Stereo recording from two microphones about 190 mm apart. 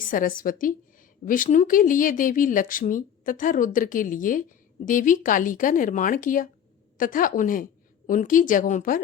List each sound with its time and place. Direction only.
0.0 s speech: 45° left (ahead or behind)